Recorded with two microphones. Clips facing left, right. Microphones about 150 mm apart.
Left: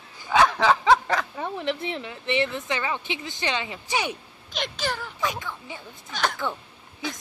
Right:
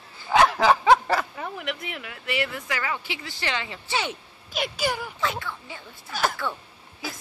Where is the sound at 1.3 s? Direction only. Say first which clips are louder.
Left 4 dB; 25° left (ahead or behind).